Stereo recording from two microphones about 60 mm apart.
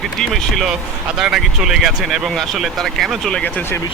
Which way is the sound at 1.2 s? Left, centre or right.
Centre.